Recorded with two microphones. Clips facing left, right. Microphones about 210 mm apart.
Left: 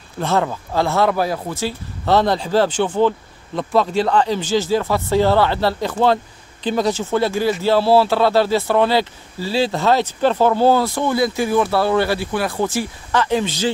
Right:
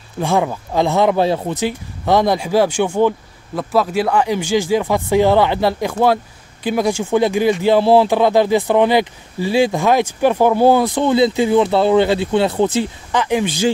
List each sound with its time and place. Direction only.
0.2 s speech: 10° right (ahead or behind)